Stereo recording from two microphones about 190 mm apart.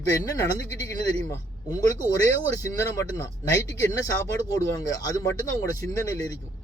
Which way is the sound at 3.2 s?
15° left (ahead or behind).